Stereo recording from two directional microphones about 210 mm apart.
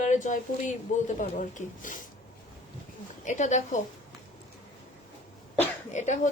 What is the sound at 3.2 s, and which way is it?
Speech, 35° left (ahead or behind).